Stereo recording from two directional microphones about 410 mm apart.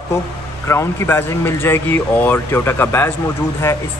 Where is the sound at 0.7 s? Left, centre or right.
Centre.